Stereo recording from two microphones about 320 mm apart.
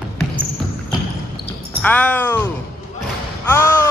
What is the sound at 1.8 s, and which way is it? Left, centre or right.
Speech, centre.